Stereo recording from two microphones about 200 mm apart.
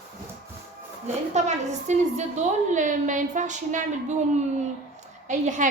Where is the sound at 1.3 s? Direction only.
35° right (ahead or behind).